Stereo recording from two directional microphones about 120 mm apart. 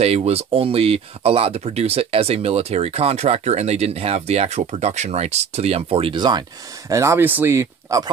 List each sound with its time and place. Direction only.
0.0 s speech: 55° right (ahead or behind); by 6.4 s 40° right (ahead or behind)
6.9 s speech: 25° right (ahead or behind)